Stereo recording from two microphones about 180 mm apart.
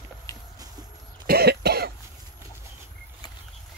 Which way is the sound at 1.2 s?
60° right (ahead or behind).